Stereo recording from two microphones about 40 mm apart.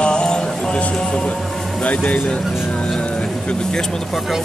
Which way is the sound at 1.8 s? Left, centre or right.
Left.